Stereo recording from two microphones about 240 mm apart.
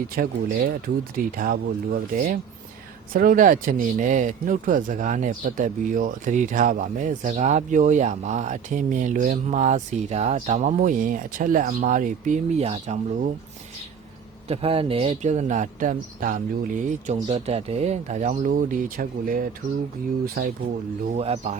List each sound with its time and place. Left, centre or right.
0.2 s speech: right
14.4 s speech: right
21.2 s speech: right